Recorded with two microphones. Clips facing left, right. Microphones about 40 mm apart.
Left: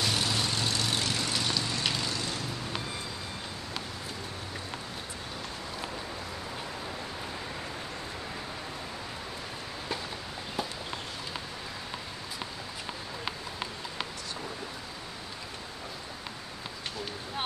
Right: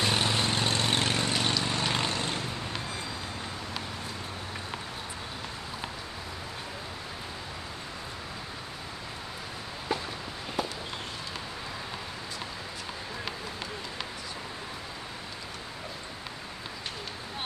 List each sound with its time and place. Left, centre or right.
0.0 s vehicle: right